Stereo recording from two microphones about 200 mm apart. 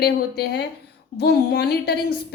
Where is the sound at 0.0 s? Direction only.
55° left (ahead or behind).